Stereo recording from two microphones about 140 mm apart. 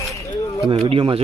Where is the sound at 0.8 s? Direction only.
40° right (ahead or behind).